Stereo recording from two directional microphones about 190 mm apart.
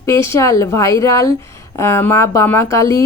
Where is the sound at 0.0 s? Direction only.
15° left (ahead or behind).